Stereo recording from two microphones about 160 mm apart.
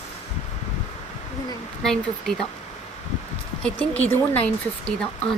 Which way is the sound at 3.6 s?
10° left (ahead or behind).